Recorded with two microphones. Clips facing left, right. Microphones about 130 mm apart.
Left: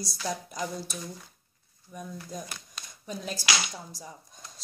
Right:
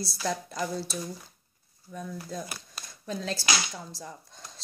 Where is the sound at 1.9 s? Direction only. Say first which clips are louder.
Right 2 dB; 15° left (ahead or behind).